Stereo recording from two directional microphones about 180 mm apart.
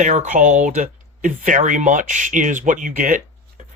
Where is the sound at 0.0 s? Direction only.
40° right (ahead or behind).